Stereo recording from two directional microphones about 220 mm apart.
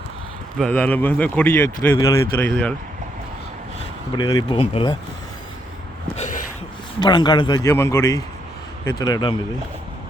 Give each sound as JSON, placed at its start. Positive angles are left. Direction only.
{"t": 0.6, "sound": "speech", "side_deg": 5}
{"t": 2.5, "sound": "speech", "side_deg": 5}
{"t": 4.1, "sound": "speech", "side_deg": 20}
{"t": 6.1, "sound": "a sound", "side_deg": 35}
{"t": 7.0, "sound": "speech", "side_deg": 20}